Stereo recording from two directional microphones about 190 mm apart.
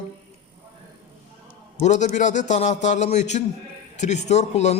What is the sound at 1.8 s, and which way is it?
Speech, 40° left (ahead or behind).